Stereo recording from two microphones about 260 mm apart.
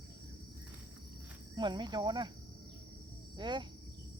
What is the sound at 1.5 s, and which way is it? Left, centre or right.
Speech, centre.